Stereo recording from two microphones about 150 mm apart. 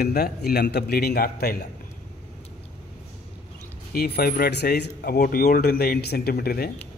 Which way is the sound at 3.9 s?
90° left.